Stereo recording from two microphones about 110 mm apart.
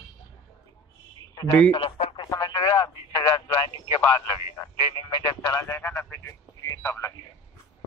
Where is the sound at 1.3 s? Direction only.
35° left (ahead or behind).